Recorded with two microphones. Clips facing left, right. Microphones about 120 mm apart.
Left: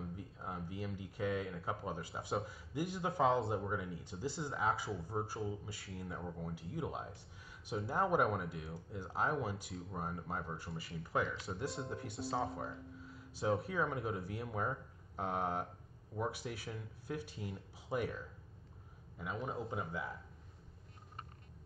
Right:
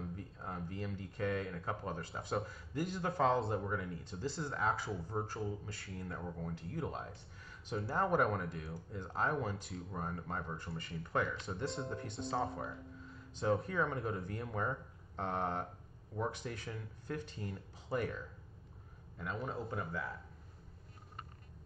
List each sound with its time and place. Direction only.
0.0 s speech: 10° left (ahead or behind)